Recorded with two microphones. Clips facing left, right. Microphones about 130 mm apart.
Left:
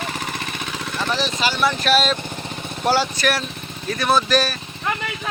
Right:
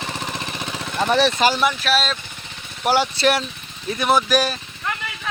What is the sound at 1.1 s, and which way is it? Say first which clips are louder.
Speech: right 7 dB; 55° right (ahead or behind).